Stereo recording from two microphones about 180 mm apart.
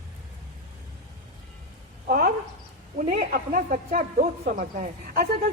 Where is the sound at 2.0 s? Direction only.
50° right (ahead or behind).